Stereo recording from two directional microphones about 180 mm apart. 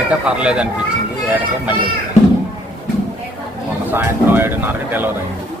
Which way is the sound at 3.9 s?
10° right (ahead or behind).